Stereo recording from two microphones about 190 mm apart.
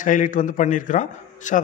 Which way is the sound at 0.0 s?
45° left (ahead or behind).